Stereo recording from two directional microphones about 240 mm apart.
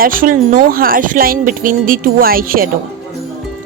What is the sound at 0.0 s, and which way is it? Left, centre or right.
Speech, right.